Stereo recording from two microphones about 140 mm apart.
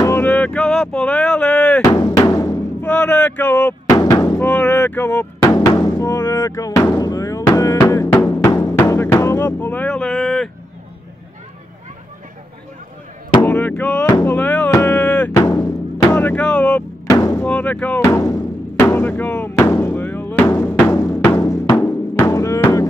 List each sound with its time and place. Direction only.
0.0 s speech: 15° left (ahead or behind)
1.8 s drum: 25° left (ahead or behind)
2.3 s timpani: 15° left (ahead or behind)
3.9 s music: 25° left (ahead or behind)
4.4 s a sound: 10° left (ahead or behind)
5.4 s music: 25° left (ahead or behind); by 10.5 s 5° left (ahead or behind)
13.5 s speech: 15° left (ahead or behind)
14.0 s speech: 25° left (ahead or behind)
14.3 s speech: 10° left (ahead or behind)
14.7 s music: 15° left (ahead or behind)
15.3 s music: 25° left (ahead or behind)
16.2 s speech: 10° left (ahead or behind)
17.1 s music: 25° left (ahead or behind)
17.5 s music: 10° left (ahead or behind)